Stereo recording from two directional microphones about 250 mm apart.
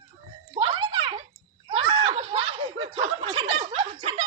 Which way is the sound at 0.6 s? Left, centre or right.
Right.